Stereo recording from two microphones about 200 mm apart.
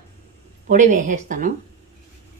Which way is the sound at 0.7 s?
40° right (ahead or behind).